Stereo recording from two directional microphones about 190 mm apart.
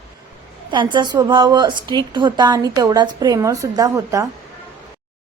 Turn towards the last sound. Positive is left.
turn(degrees=-15)  # may be behind; listen again after turning